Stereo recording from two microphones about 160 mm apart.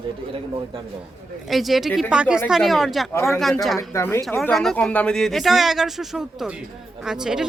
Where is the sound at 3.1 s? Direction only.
15° left (ahead or behind).